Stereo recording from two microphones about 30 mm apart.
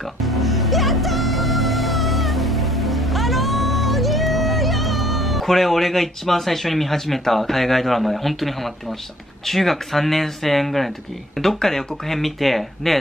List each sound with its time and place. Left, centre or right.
0.2 s music: centre
9.5 s speech: centre